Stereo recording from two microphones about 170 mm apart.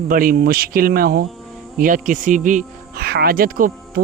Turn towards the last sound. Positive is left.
turn(degrees=-55)  # may be behind; listen again after turning